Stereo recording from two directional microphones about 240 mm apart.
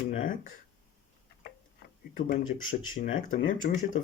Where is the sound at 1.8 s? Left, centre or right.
Left.